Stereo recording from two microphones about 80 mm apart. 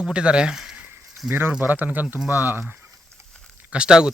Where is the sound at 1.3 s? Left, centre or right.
Right.